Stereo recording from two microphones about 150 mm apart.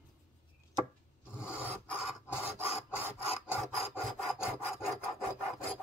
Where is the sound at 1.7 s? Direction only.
10° right (ahead or behind).